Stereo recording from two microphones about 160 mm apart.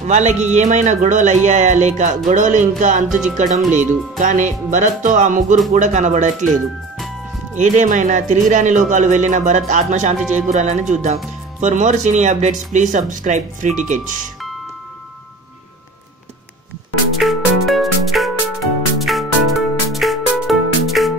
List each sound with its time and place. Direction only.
0.0 s speech: 45° right (ahead or behind)
7.5 s speech: 50° right (ahead or behind)
17.2 s music: centre (ahead or behind)